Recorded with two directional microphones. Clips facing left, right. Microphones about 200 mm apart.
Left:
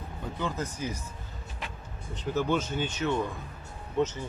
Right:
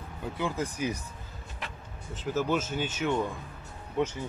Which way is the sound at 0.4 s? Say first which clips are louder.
Right 2 dB; 10° right (ahead or behind).